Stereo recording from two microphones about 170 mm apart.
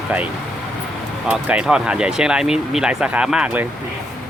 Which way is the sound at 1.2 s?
10° right (ahead or behind).